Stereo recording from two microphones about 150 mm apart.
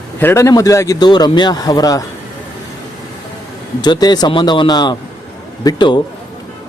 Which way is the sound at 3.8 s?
25° left (ahead or behind).